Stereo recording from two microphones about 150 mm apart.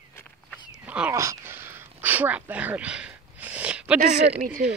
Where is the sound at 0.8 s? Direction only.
10° right (ahead or behind).